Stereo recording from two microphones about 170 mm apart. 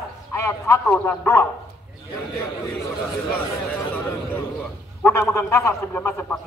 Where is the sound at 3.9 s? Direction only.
10° left (ahead or behind).